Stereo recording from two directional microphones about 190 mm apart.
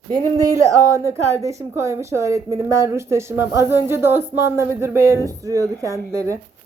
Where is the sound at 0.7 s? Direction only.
15° right (ahead or behind).